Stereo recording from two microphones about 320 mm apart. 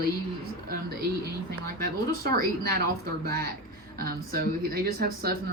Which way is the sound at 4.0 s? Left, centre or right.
Right.